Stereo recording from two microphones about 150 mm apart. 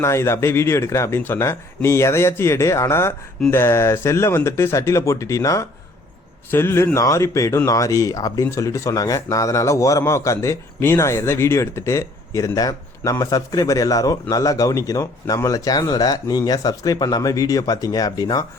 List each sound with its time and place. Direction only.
0.0 s speech: 20° left (ahead or behind)